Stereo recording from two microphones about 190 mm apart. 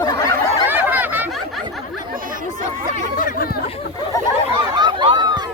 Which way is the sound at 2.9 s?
45° left (ahead or behind).